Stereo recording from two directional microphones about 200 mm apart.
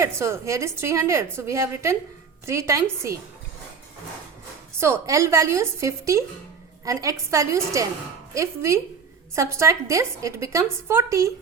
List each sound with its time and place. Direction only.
0.0 s a woman's voice: 15° right (ahead or behind)
4.8 s a woman's voice: 15° right (ahead or behind)